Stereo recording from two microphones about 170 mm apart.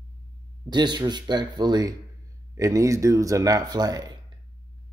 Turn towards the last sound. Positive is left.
turn(degrees=-25)  # may be behind; listen again after turning